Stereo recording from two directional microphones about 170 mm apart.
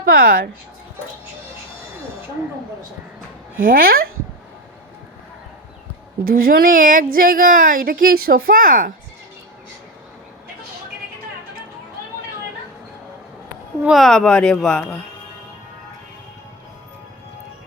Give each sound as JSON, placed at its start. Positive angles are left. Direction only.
{"t": 0.1, "sound": "speech", "side_deg": -60}
{"t": 3.6, "sound": "speech", "side_deg": -55}
{"t": 6.2, "sound": "speech", "side_deg": -60}
{"t": 13.8, "sound": "speech", "side_deg": 0}